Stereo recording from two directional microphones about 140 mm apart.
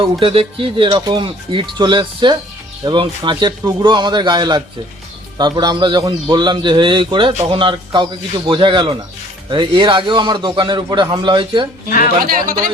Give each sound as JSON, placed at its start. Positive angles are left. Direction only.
{"t": 0.0, "sound": "speech", "side_deg": -40}
{"t": 12.2, "sound": "speech", "side_deg": -80}